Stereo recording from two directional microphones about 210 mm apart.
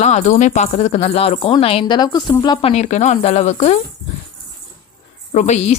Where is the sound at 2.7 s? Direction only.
35° left (ahead or behind).